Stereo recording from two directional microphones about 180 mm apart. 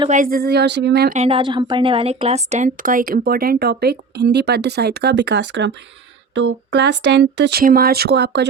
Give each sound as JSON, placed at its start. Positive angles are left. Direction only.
{"t": 0.1, "sound": "a woman's voice", "side_deg": -50}
{"t": 1.1, "sound": "a woman's voice", "side_deg": -35}
{"t": 7.6, "sound": "a woman's voice", "side_deg": -55}